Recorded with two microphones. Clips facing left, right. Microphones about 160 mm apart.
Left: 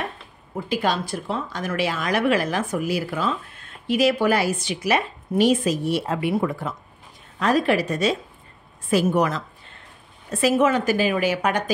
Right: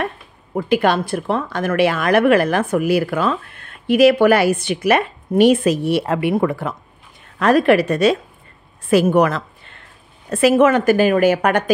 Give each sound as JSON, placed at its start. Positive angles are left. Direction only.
{"t": 0.6, "sound": "a woman's voice", "side_deg": -65}